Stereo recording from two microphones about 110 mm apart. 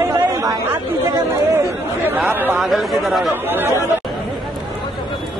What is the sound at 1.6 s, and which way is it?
Speech, 20° right (ahead or behind).